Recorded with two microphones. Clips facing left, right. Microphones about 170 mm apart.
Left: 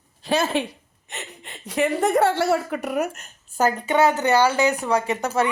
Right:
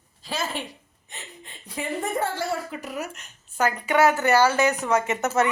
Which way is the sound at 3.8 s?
20° left (ahead or behind).